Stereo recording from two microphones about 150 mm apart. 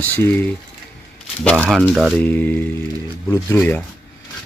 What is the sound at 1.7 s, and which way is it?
Speech, centre (ahead or behind).